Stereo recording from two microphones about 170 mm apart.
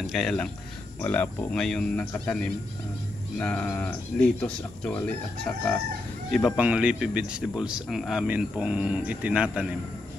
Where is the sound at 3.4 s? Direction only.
10° left (ahead or behind).